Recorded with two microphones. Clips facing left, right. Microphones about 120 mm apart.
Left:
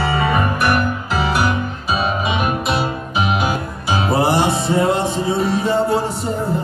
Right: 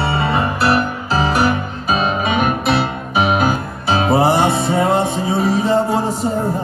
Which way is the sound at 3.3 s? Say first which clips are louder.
Right 3 dB; 45° right (ahead or behind).